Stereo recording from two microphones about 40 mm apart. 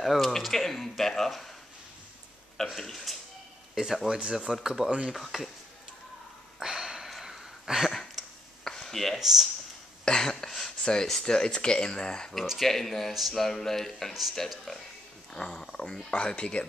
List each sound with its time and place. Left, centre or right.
0.0 s speech: centre
2.5 s speech: centre
3.7 s speech: centre
6.6 s a sound: centre
8.6 s a sound: centre
9.2 s speech: centre
10.0 s a sound: centre
10.8 s speech: centre
12.5 s speech: centre
15.3 s speech: left